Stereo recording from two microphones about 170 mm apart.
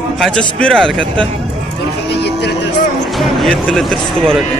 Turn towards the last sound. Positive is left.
turn(degrees=0)  # may be behind; listen again after turning